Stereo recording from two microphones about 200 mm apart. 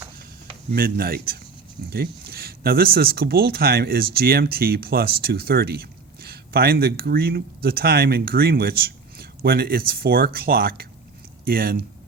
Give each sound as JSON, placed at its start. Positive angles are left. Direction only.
{"t": 0.7, "sound": "speech", "side_deg": -50}